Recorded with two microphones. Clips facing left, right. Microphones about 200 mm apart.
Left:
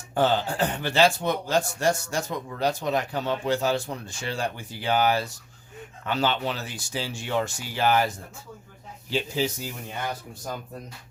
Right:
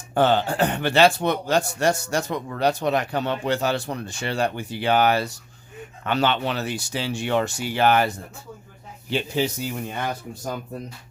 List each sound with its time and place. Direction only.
0.1 s a man's voice: 65° right (ahead or behind)